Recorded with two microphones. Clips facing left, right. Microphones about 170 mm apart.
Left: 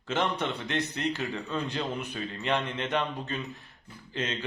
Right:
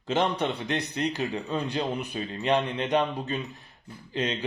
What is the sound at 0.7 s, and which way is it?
A man's voice, 15° right (ahead or behind).